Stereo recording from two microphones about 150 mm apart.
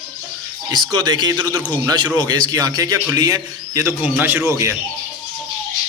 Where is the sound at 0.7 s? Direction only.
30° right (ahead or behind).